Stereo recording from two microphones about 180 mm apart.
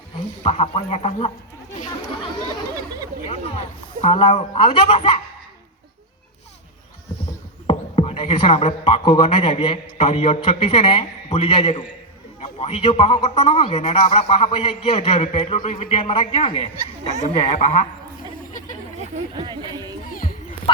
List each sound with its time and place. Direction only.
0.4 s a man's voice: 35° left (ahead or behind)
3.2 s speech: 35° left (ahead or behind)
7.7 s a man's voice: 35° left (ahead or behind)
19.4 s speech: 25° right (ahead or behind)
20.2 s a sound: 45° left (ahead or behind)